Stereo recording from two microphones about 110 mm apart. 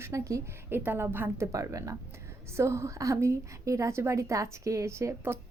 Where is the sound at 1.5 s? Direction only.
30° right (ahead or behind).